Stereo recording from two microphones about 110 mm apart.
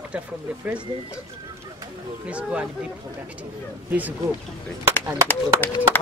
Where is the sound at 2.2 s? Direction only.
10° right (ahead or behind).